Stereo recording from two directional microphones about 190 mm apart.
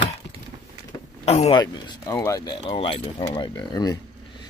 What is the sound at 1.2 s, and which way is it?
Speech, 30° left (ahead or behind).